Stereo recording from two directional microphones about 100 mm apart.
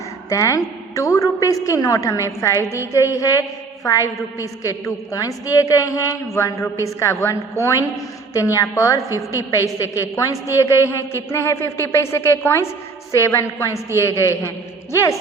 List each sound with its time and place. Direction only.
0.3 s a woman's voice: 35° left (ahead or behind)